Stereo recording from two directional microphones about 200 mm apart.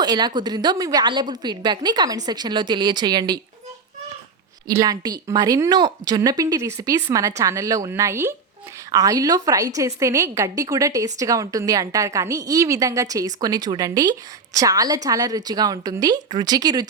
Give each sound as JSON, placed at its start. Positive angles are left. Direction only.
{"t": 0.0, "sound": "a woman's voice", "side_deg": -20}
{"t": 4.7, "sound": "a woman's voice", "side_deg": -20}